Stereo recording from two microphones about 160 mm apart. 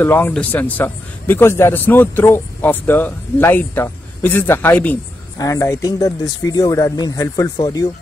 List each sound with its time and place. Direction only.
0.0 s a man's voice: 10° left (ahead or behind)
5.4 s speech: 20° left (ahead or behind)